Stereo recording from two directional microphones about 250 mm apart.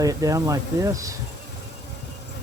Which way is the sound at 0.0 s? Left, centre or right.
Centre.